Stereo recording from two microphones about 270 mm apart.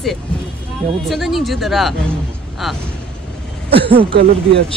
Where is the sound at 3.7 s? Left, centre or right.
Centre.